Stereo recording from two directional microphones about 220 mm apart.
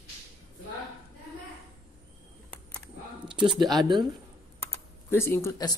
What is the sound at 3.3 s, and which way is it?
Female singing, centre (ahead or behind).